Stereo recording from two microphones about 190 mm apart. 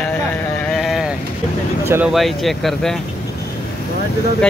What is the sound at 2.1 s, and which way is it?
Speech, centre (ahead or behind).